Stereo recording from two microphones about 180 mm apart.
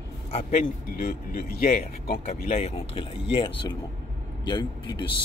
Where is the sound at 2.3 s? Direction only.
35° left (ahead or behind).